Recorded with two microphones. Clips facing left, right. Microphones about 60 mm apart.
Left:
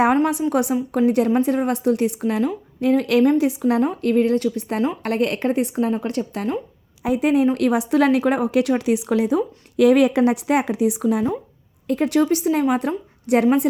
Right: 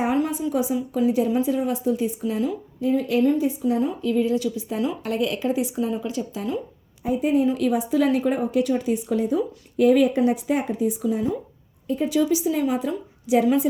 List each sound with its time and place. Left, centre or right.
0.5 s a woman's voice: left
7.0 s a woman's voice: left